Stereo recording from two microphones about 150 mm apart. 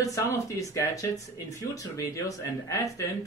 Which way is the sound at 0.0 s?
20° left (ahead or behind).